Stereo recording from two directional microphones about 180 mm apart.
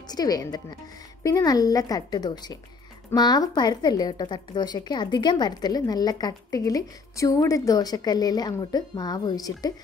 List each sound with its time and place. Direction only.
0.1 s a woman's voice: 20° left (ahead or behind)